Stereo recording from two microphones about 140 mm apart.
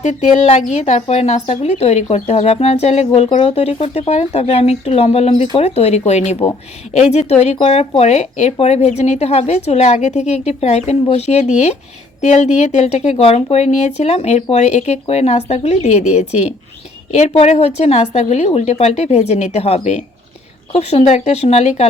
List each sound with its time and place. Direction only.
0.0 s speech: 55° left (ahead or behind)